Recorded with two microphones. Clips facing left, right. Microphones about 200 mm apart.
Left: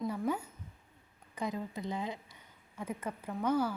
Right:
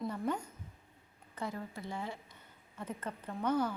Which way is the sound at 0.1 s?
10° left (ahead or behind).